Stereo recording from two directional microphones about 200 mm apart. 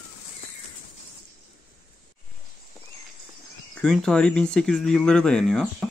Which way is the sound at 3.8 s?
5° left (ahead or behind).